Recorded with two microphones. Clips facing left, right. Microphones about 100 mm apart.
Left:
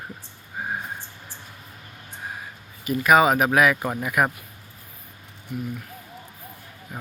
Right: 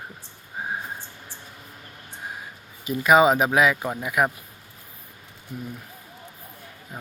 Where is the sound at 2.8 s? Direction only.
20° right (ahead or behind).